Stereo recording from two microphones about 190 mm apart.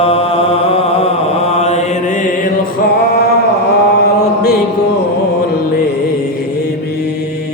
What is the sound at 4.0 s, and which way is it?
Mantra, 60° left (ahead or behind).